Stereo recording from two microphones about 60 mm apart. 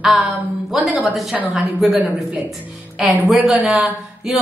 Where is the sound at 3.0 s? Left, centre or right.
Centre.